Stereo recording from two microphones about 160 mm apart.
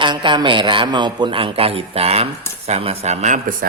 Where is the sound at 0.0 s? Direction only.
30° right (ahead or behind).